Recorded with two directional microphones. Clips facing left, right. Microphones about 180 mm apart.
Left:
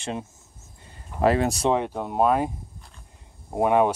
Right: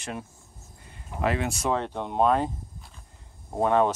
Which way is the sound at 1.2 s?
35° left (ahead or behind).